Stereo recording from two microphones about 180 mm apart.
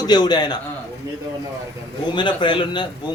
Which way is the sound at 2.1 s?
25° left (ahead or behind).